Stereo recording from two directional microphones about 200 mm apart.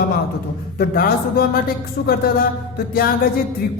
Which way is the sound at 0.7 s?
50° left (ahead or behind).